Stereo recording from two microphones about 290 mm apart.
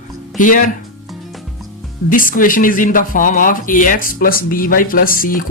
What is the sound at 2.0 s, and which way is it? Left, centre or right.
Speech, left.